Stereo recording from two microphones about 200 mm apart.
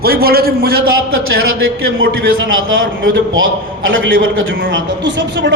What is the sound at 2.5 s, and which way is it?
A man's voice, 80° right.